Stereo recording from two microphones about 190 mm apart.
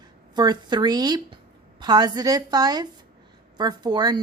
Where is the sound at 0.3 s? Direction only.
20° right (ahead or behind).